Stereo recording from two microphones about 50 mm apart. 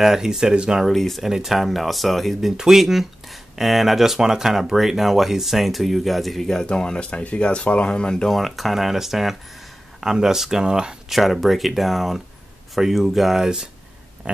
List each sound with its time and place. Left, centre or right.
0.0 s speech: centre
0.8 s speech: centre
2.5 s speech: centre
6.6 s speech: centre
8.3 s speech: centre
11.1 s speech: centre
14.2 s a sound: right